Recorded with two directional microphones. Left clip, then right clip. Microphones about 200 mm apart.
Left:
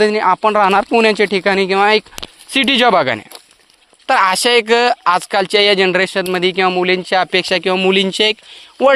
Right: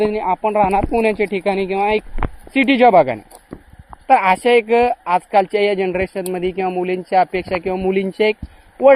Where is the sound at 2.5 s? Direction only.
Centre (ahead or behind).